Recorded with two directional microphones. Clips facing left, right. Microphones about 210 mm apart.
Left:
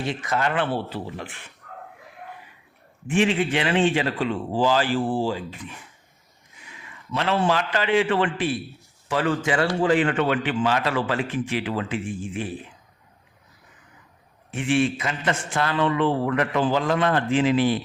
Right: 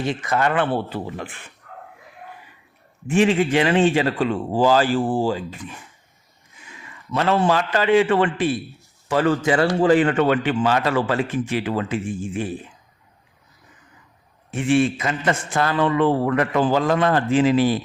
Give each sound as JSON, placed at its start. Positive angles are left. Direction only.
{"t": 0.3, "sound": "a man's voice", "side_deg": -50}
{"t": 3.1, "sound": "a man's voice", "side_deg": -40}
{"t": 7.1, "sound": "a man's voice", "side_deg": -45}
{"t": 14.5, "sound": "a man's voice", "side_deg": -40}